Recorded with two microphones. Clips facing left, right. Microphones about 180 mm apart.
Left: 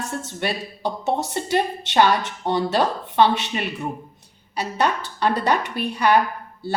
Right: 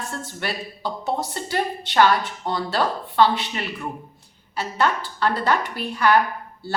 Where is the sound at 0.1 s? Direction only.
20° left (ahead or behind).